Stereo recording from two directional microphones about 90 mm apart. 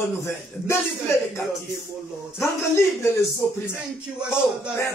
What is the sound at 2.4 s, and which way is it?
Speech, 30° left (ahead or behind).